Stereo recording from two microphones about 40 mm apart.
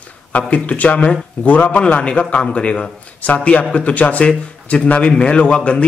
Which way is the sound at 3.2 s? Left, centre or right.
Left.